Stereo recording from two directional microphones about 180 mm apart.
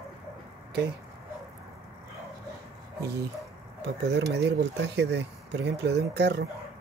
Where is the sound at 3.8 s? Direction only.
70° right (ahead or behind).